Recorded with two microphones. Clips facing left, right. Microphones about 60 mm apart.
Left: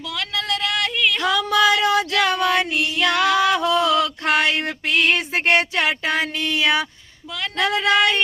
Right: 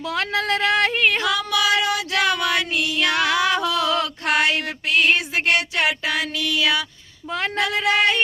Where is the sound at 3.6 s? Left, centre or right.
Left.